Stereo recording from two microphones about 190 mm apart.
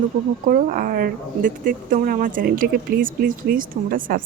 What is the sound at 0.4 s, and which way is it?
Speech, 45° right (ahead or behind).